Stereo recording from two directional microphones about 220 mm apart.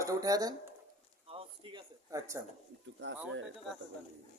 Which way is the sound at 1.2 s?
25° right (ahead or behind).